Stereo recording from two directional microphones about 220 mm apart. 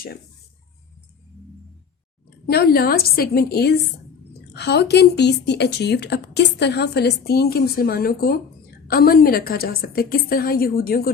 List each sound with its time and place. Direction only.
2.5 s a woman's voice: 45° left (ahead or behind)